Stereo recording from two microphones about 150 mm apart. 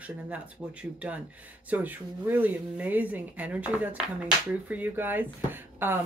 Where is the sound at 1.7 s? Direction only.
10° right (ahead or behind).